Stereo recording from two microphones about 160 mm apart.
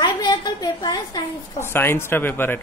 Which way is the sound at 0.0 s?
25° left (ahead or behind).